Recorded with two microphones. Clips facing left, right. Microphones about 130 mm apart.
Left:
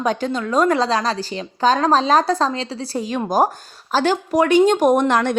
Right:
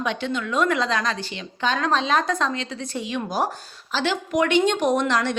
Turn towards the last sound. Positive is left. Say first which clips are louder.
# left 6 dB
turn(degrees=50)  # may be behind; listen again after turning